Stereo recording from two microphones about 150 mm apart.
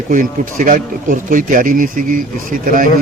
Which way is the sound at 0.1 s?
65° right (ahead or behind).